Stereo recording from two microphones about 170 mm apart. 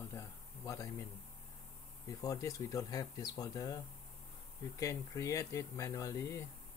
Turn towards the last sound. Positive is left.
turn(degrees=20)  # may be behind; listen again after turning